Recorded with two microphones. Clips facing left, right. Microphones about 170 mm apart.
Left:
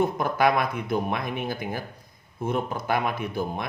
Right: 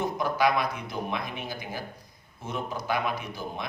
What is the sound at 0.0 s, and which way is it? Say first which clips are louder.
A man's voice: left 3 dB; 55° left (ahead or behind).